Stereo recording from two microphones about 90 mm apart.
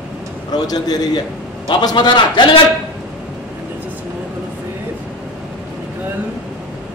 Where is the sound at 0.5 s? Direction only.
45° left (ahead or behind).